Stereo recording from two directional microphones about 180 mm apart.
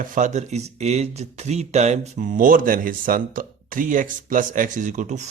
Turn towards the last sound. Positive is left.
turn(degrees=-40)  # may be behind; listen again after turning